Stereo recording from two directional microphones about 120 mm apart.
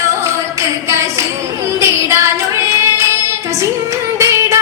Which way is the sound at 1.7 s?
25° right (ahead or behind).